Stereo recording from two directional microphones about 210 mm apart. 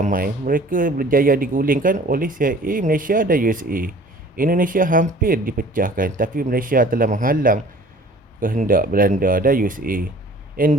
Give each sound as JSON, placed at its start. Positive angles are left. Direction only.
{"t": 0.0, "sound": "speech", "side_deg": -40}